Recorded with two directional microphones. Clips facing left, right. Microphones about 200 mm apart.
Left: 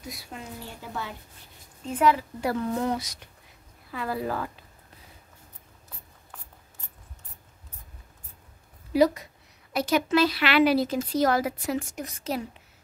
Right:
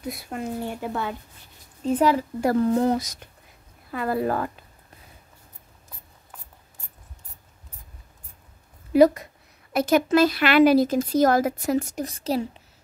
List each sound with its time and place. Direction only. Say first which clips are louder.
0.0 s speech: right 9 dB; 55° right (ahead or behind)
2.0 s speech: right 1 dB; 40° right (ahead or behind)
3.9 s a woman's voice: right 5 dB; 50° right (ahead or behind)
8.9 s a woman's voice: right 5 dB; 50° right (ahead or behind); by 12.6 s 30° right (ahead or behind)